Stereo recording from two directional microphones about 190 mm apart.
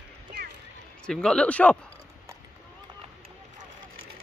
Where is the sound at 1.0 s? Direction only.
5° left (ahead or behind).